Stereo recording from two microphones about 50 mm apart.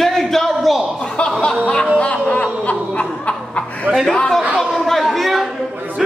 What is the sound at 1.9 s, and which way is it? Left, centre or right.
Snicker, left.